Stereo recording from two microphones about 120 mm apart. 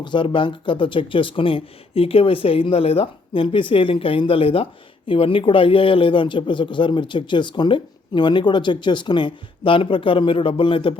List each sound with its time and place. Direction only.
0.0 s speech: 40° left (ahead or behind)